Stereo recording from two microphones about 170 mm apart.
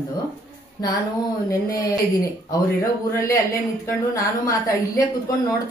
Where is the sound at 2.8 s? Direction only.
15° left (ahead or behind).